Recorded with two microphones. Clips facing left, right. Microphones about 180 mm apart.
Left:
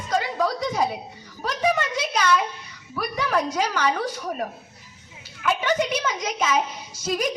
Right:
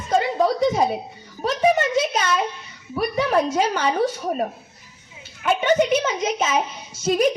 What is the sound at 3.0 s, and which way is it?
A woman's voice, 25° right (ahead or behind).